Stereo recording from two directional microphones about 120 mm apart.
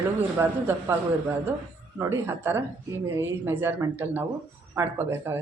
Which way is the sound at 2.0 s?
20° right (ahead or behind).